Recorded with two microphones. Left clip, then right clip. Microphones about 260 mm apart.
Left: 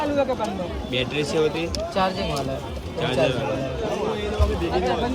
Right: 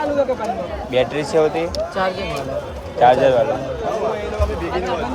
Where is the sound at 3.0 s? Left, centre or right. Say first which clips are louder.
Right 10 dB; centre.